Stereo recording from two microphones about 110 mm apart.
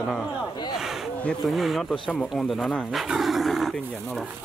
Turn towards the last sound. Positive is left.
turn(degrees=0)  # may be behind; listen again after turning